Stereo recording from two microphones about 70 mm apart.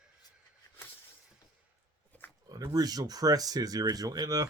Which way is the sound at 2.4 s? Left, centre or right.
Right.